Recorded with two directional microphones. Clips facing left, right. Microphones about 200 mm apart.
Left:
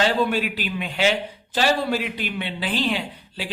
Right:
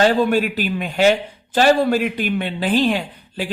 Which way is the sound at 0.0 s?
45° right (ahead or behind).